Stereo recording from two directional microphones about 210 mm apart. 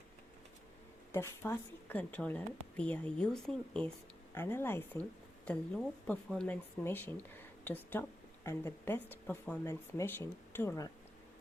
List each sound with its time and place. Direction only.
1.1 s a woman's voice: 10° left (ahead or behind)